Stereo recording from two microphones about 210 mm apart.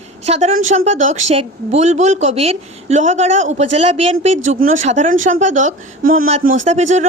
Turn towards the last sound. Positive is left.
turn(degrees=-35)  # may be behind; listen again after turning